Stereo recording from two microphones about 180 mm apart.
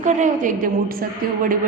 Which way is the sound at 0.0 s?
45° right (ahead or behind).